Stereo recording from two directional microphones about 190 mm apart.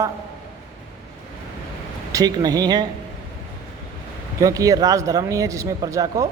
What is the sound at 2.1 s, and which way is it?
Speech, 20° right (ahead or behind).